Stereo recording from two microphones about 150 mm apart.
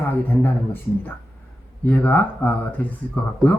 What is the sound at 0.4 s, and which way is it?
Speech, 15° left (ahead or behind).